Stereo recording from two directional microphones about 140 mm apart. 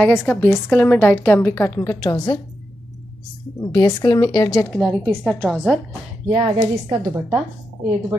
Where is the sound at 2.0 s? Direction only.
30° left (ahead or behind).